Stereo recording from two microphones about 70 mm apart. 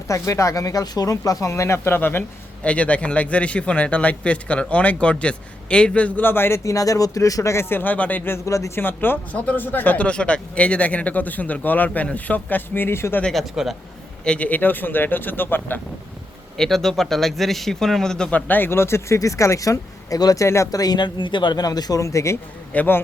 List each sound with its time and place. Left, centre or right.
0.1 s speech: left
2.6 s speech: centre
6.7 s speech: left
7.5 s speech: left
8.4 s speech: left
8.7 s speech: left
13.3 s a man's voice: centre
14.3 s speech: centre
16.6 s a man's voice: centre
18.3 s speech: left
20.4 s speech: left
20.7 s speech: left
22.0 s speech: left
22.7 s speech: left